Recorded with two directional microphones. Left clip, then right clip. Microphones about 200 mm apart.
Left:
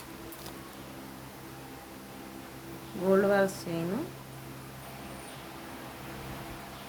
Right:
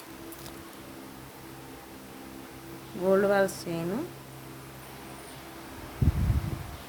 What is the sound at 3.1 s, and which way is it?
Speech, 30° right (ahead or behind).